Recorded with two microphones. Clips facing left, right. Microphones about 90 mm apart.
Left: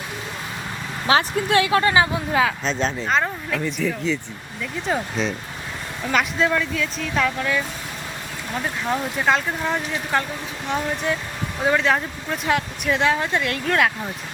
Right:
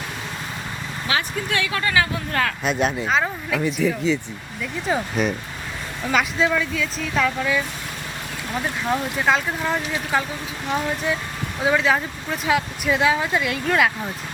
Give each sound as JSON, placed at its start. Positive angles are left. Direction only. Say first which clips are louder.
{"t": 1.0, "sound": "speech", "louder": "left 6 dB", "side_deg": 30}
{"t": 2.6, "sound": "speech", "louder": "right 2 dB", "side_deg": -10}
{"t": 8.9, "sound": "speech", "louder": "even", "side_deg": 0}